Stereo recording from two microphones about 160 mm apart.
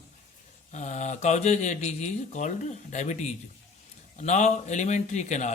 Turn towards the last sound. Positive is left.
turn(degrees=45)  # may be behind; listen again after turning